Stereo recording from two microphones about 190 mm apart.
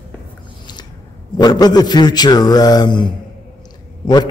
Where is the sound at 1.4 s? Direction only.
20° left (ahead or behind).